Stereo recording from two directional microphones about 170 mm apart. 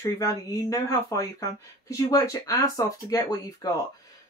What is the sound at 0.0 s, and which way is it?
Speech, 20° left (ahead or behind).